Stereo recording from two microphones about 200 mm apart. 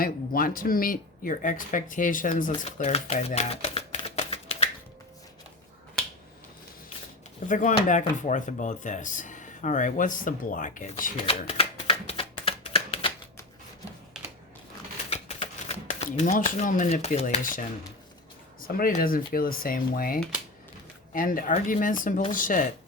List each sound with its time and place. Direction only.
0.0 s speech: 45° left (ahead or behind)
7.4 s speech: 40° left (ahead or behind)
11.3 s a sound: 30° left (ahead or behind)
15.1 s shuffling cards: 30° left (ahead or behind)
18.6 s speech: 45° left (ahead or behind)